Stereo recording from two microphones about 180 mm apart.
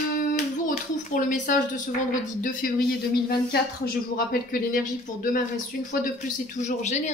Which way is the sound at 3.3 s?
60° left (ahead or behind).